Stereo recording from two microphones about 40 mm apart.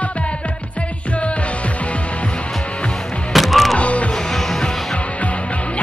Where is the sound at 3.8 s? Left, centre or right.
Left.